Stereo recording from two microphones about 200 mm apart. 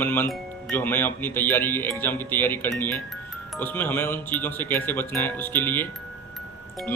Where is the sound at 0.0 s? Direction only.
10° left (ahead or behind).